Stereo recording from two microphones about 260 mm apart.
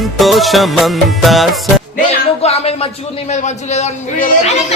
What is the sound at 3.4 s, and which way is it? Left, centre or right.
Speech, left.